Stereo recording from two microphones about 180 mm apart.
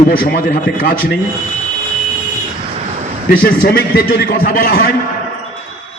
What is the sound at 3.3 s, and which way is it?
A man's voice, 55° left (ahead or behind).